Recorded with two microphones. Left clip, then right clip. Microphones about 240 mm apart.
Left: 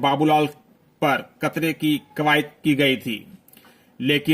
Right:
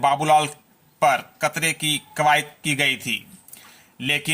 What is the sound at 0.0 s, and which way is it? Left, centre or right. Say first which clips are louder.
A man's voice: right 1 dB; centre.